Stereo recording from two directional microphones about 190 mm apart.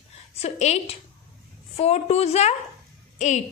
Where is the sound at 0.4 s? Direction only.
35° left (ahead or behind).